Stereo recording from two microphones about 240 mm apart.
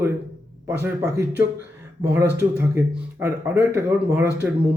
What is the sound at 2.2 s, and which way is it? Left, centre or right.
Speech, right.